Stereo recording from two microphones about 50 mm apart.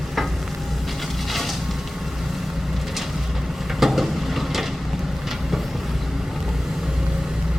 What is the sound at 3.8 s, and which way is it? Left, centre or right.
Vehicle, centre.